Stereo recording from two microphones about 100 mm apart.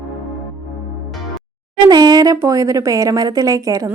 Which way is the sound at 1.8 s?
45° right (ahead or behind).